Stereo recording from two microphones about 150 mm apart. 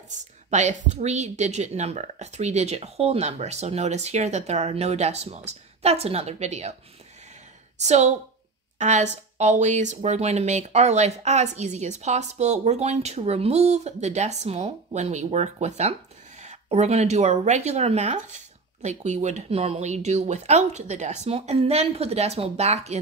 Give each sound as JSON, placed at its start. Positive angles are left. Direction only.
{"t": 0.1, "sound": "a woman's voice", "side_deg": -50}
{"t": 7.8, "sound": "a woman's voice", "side_deg": -50}